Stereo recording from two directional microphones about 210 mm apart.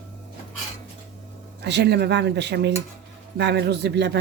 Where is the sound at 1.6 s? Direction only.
55° right (ahead or behind).